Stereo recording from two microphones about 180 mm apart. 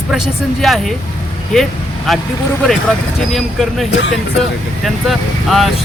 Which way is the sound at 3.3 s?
Centre (ahead or behind).